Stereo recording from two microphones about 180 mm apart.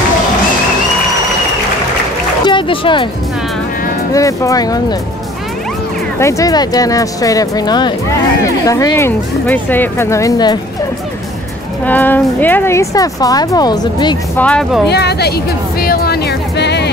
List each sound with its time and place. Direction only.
2.4 s speech: 30° left (ahead or behind)
4.1 s speech: 20° left (ahead or behind)
6.1 s speech: 15° left (ahead or behind)
11.8 s speech: 10° left (ahead or behind)
14.3 s speech: 5° left (ahead or behind)
14.9 s music: 65° left (ahead or behind)